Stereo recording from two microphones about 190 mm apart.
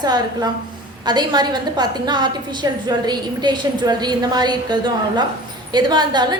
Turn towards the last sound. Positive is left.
turn(degrees=-20)  # may be behind; listen again after turning